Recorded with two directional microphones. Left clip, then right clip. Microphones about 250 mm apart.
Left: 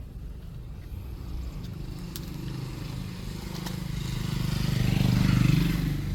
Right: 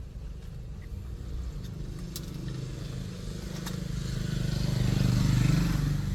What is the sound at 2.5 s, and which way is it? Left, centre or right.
Vehicle, left.